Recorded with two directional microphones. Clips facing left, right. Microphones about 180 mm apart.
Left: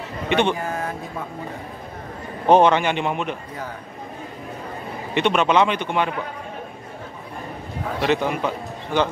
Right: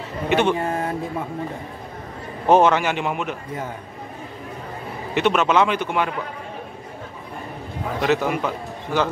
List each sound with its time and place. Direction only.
0.3 s speech: 5° right (ahead or behind)
0.6 s a sound: 30° right (ahead or behind)
2.4 s a man's voice: 5° right (ahead or behind)
5.1 s a man's voice: 5° right (ahead or behind)
8.0 s a man's voice: 5° right (ahead or behind)